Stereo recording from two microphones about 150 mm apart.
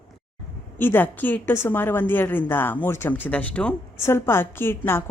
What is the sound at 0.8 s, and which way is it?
Speech, 15° left (ahead or behind).